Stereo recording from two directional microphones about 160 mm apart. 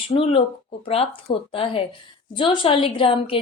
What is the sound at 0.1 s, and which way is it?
A woman's voice, 35° left (ahead or behind).